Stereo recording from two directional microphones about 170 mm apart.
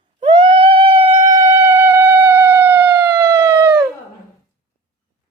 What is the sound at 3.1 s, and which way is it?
Howl, 15° right (ahead or behind).